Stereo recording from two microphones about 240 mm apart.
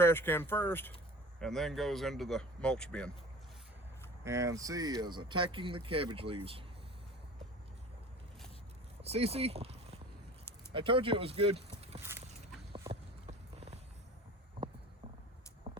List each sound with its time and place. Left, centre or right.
0.0 s speech: centre
4.2 s speech: centre
9.0 s speech: right
12.7 s a sound: right